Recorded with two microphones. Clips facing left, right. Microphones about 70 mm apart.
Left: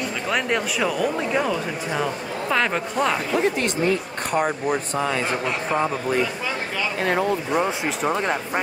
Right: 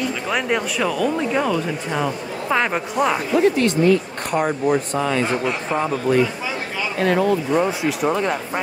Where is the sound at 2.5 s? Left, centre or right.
Centre.